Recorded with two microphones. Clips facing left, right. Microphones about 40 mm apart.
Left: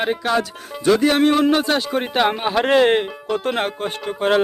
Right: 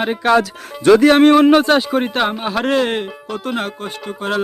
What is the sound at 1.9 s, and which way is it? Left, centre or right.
Speech, centre.